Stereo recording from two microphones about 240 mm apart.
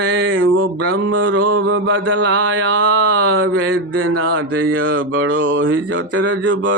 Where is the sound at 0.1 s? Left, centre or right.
Right.